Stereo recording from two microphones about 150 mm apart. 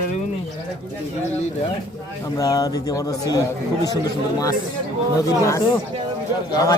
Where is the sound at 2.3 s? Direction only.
25° left (ahead or behind).